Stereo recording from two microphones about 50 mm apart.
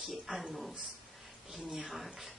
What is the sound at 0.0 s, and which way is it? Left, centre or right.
Speech, centre.